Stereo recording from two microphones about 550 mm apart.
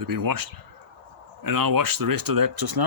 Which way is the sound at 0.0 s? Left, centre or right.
Right.